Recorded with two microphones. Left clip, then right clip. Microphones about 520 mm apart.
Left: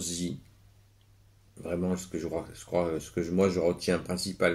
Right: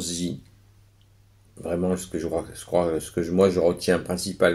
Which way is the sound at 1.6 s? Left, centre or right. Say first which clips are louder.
Right 7 dB; left.